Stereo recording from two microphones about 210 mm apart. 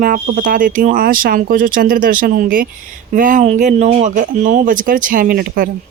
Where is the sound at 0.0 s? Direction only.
40° right (ahead or behind).